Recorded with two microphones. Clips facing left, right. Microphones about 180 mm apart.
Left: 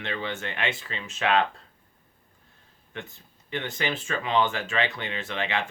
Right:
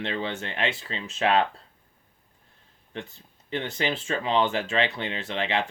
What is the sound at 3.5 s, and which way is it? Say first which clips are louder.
Speech: right 2 dB; 30° right (ahead or behind).